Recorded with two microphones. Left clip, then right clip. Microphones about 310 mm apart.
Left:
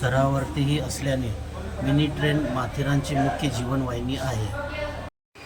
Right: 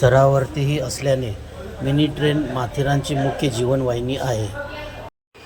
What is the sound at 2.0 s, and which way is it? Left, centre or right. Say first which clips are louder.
Speech: right 6 dB; centre.